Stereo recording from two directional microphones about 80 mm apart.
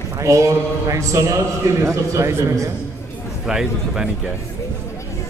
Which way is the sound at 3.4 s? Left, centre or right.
Centre.